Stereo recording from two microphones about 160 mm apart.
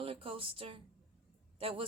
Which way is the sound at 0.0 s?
35° right (ahead or behind).